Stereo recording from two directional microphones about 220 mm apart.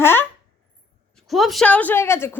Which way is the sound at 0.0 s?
10° left (ahead or behind).